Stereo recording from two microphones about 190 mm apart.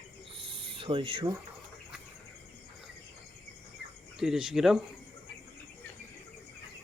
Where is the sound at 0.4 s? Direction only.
25° right (ahead or behind).